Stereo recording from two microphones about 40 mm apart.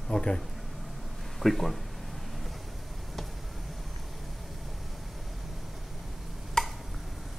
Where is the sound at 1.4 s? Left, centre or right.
Centre.